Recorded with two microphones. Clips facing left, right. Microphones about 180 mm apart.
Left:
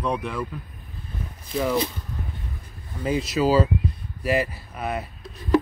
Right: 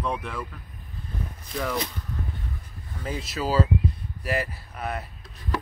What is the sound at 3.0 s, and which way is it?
Speech, 20° left (ahead or behind).